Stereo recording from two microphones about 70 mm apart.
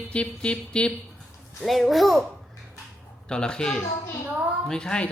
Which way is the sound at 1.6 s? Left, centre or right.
Centre.